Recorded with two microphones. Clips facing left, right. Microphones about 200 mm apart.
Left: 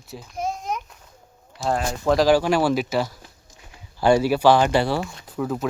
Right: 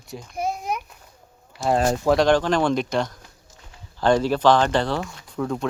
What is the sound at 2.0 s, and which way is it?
Speech, centre (ahead or behind).